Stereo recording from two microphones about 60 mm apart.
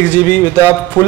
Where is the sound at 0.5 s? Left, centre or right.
Left.